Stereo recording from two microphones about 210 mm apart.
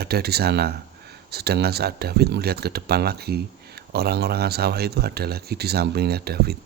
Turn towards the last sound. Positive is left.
turn(degrees=-50)  # may be behind; listen again after turning